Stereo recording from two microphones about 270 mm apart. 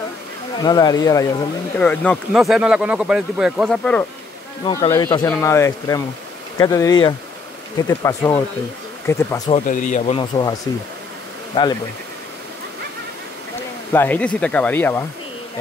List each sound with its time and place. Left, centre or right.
0.6 s speech: centre
4.6 s speech: centre
9.5 s speech: left
11.6 s speech: centre
13.9 s speech: centre